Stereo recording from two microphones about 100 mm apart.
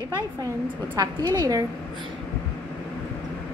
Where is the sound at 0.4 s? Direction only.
35° right (ahead or behind).